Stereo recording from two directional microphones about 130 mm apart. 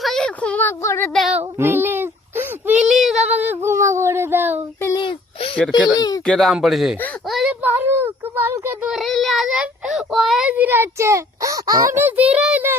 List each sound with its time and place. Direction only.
0.0 s a sound: 5° left (ahead or behind)
0.8 s a sound: 20° left (ahead or behind)
1.4 s child singing: 15° right (ahead or behind)
2.8 s female singing: centre (ahead or behind)
3.2 s a child's voice: 15° right (ahead or behind)
4.9 s a sound: 40° left (ahead or behind)
5.9 s a sound: 30° left (ahead or behind)
6.2 s speech: 5° left (ahead or behind)
7.3 s child singing: centre (ahead or behind)
7.6 s child singing: 15° right (ahead or behind)
9.0 s speech: centre (ahead or behind)
10.5 s a child's voice: 15° right (ahead or behind)
11.9 s a child's voice: 15° right (ahead or behind)